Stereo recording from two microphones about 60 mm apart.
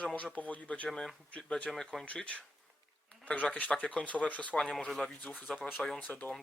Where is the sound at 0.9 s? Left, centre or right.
Centre.